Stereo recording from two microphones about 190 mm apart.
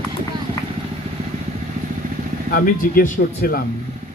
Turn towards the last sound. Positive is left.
turn(degrees=50)  # may be behind; listen again after turning